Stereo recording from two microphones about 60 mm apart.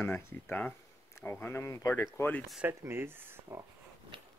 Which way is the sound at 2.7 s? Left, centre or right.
Right.